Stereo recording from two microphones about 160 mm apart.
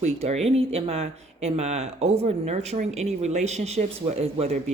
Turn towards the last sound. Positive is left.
turn(degrees=-40)  # may be behind; listen again after turning